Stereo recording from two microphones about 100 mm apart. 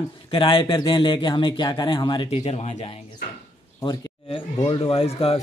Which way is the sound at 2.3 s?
90° left.